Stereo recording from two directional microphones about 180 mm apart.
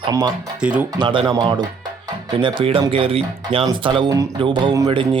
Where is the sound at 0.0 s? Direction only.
25° right (ahead or behind).